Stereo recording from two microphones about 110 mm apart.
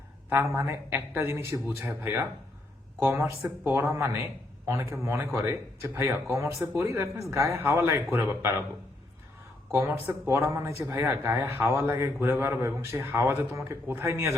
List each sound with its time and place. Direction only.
0.3 s speech: 20° right (ahead or behind)
9.7 s speech: 20° right (ahead or behind)